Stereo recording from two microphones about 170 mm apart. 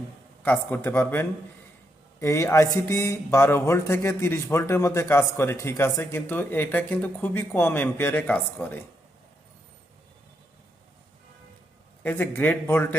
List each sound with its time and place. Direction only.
0.4 s speech: 10° left (ahead or behind)
12.0 s speech: 15° left (ahead or behind)